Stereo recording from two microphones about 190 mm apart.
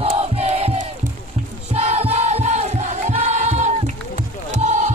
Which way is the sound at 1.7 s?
35° right (ahead or behind).